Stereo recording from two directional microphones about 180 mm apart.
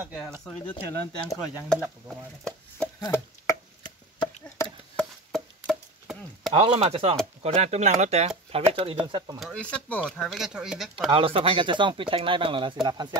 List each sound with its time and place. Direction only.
0.0 s speech: 10° right (ahead or behind)
1.7 s chopping: centre (ahead or behind)
3.0 s chopping: 20° left (ahead or behind)
4.9 s chop: centre (ahead or behind)
6.5 s chopping: 30° right (ahead or behind)
8.5 s speech: 30° right (ahead or behind)
9.4 s speech: 5° left (ahead or behind)
11.1 s speech: 30° right (ahead or behind)